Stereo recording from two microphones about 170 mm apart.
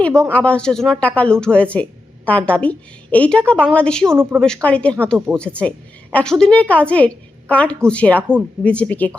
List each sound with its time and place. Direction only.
0.1 s speech: 15° right (ahead or behind)
0.3 s a woman's voice: 5° left (ahead or behind)
4.0 s speech: 15° right (ahead or behind)
4.4 s a woman's voice: 5° left (ahead or behind)